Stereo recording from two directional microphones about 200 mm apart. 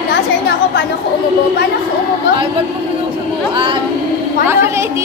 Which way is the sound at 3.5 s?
25° right (ahead or behind).